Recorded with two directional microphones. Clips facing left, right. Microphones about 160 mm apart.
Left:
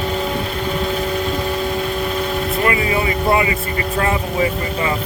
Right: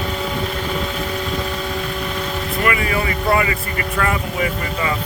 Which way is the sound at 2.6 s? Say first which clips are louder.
Left 1 dB; 25° left (ahead or behind).